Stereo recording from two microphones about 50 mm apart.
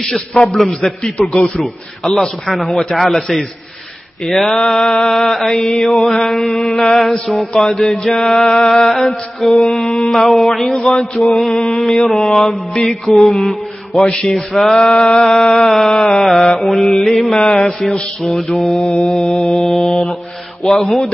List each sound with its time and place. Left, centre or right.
0.0 s mantra: centre
11.6 s mantra: centre
14.0 s mantra: centre
14.5 s mantra: centre
17.4 s mantra: centre
18.9 s mantra: left
19.3 s mantra: centre